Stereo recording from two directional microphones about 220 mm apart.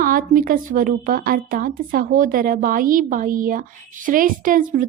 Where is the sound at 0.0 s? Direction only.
40° right (ahead or behind).